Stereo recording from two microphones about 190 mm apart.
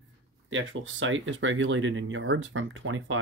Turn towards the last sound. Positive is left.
turn(degrees=-85)